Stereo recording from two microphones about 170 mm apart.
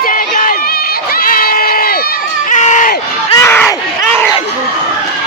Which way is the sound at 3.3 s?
15° left (ahead or behind).